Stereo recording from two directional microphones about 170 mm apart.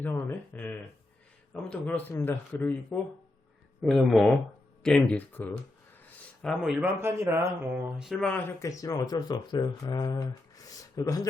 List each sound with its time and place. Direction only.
0.0 s speech: 10° left (ahead or behind)
3.8 s speech: centre (ahead or behind)
7.0 s speech: 15° right (ahead or behind)
8.1 s speech: 10° left (ahead or behind)